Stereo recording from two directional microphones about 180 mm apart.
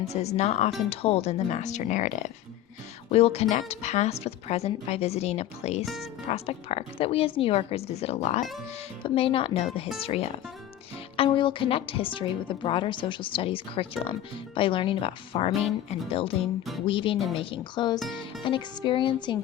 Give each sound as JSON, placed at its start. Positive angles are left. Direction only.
{"t": 0.0, "sound": "a woman's voice", "side_deg": 35}
{"t": 5.8, "sound": "speech", "side_deg": 0}
{"t": 6.2, "sound": "a woman's voice", "side_deg": 35}